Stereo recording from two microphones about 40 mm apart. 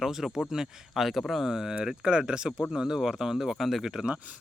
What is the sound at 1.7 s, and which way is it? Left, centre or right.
Speech, right.